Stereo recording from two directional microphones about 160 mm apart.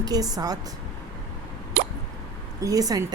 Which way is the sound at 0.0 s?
25° right (ahead or behind).